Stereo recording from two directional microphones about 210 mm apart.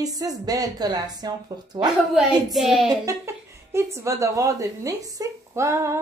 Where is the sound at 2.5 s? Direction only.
Centre (ahead or behind).